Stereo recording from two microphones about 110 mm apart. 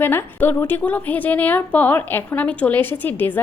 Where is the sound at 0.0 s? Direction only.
20° left (ahead or behind).